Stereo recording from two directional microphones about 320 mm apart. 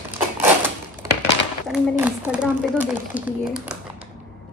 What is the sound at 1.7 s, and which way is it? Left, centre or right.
Speech, centre.